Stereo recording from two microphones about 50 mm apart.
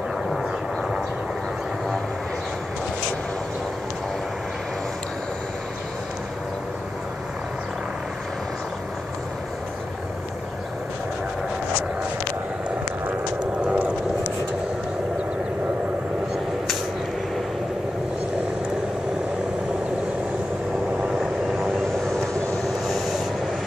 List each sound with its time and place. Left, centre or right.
13.6 s vehicle: right
22.8 s train: centre